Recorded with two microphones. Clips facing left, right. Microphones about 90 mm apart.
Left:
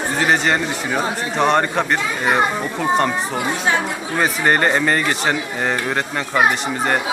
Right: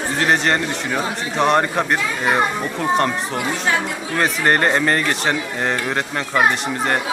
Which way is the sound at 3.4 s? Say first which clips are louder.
Left 1 dB; 20° left (ahead or behind).